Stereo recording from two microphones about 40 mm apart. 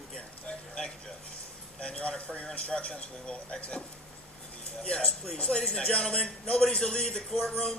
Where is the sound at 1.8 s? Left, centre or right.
Left.